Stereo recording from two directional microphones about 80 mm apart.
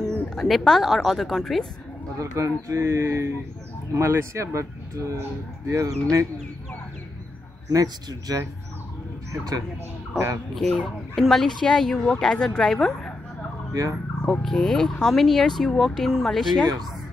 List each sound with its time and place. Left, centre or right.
0.4 s speech: centre
2.1 s speech: right
7.7 s a man's voice: right
10.1 s speech: right
10.5 s speech: centre
14.2 s speech: centre